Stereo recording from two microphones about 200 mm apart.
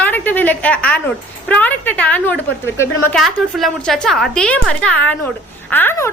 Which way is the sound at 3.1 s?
Centre (ahead or behind).